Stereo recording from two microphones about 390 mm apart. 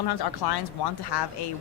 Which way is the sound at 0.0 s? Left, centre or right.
Left.